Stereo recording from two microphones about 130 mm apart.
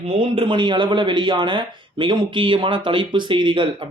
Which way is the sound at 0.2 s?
40° right (ahead or behind).